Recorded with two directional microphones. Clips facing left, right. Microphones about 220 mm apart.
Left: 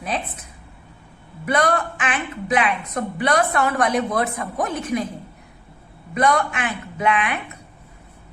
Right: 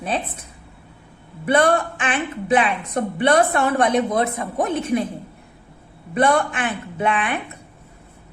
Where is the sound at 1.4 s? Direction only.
30° right (ahead or behind).